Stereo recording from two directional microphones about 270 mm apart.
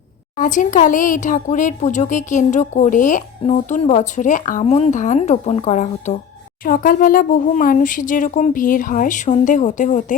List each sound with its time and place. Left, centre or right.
0.3 s speech: left